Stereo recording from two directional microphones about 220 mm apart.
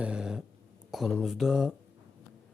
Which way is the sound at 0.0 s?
5° right (ahead or behind).